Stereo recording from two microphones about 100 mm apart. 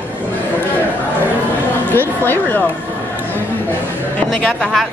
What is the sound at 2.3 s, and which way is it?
Speech, 20° left (ahead or behind).